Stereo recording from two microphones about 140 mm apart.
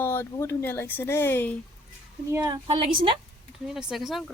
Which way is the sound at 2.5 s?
35° right (ahead or behind).